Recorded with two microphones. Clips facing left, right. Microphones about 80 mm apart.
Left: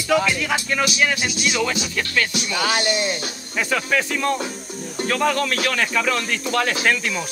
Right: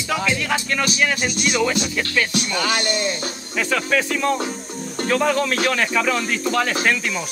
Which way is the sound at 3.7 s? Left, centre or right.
Centre.